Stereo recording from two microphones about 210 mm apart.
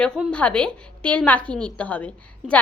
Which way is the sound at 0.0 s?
5° left (ahead or behind).